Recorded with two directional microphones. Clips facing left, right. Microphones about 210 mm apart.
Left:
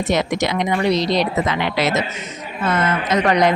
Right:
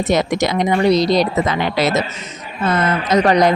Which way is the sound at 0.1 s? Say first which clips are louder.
Right 3 dB; 40° right (ahead or behind).